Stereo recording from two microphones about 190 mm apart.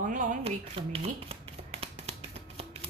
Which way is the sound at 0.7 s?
30° right (ahead or behind).